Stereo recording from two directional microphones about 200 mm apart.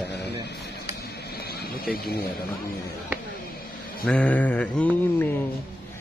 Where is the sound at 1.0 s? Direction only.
55° left (ahead or behind).